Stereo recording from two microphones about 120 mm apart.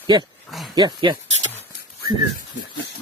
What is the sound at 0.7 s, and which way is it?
Speech, 40° right (ahead or behind).